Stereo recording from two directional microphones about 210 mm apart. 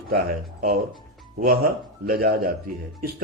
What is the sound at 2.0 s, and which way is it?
Speech, 45° right (ahead or behind).